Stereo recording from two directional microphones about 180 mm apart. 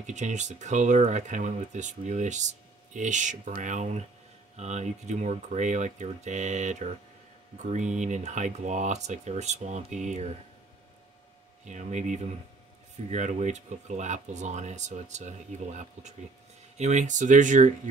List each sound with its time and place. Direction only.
0.0 s speech: 40° right (ahead or behind)
11.6 s speech: 40° right (ahead or behind)
16.7 s speech: 40° right (ahead or behind)